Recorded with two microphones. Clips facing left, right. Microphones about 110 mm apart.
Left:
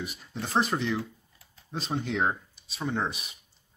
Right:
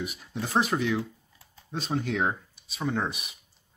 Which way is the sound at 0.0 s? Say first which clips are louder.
Right 2 dB; 5° right (ahead or behind).